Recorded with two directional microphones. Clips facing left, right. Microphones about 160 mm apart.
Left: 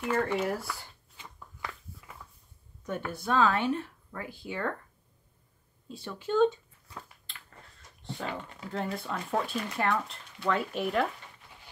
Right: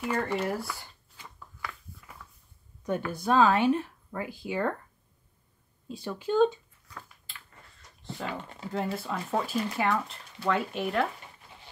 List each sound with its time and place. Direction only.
0.0 s speech: centre (ahead or behind)
1.1 s a sound: 25° left (ahead or behind)
2.9 s speech: 15° right (ahead or behind)
5.9 s speech: 10° right (ahead or behind)
7.3 s a sound: 5° right (ahead or behind)
8.9 s speech: 5° right (ahead or behind)